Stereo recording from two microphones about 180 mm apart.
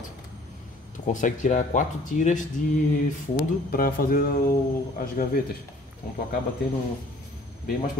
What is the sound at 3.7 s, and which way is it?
Speech, 55° left (ahead or behind).